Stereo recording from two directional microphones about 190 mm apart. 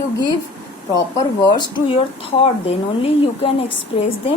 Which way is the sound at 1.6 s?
25° left (ahead or behind).